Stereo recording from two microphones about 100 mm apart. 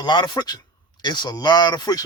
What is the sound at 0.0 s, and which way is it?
Speech, 45° left (ahead or behind).